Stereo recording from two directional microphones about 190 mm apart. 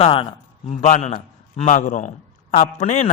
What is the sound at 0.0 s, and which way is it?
A man's voice, 30° left (ahead or behind).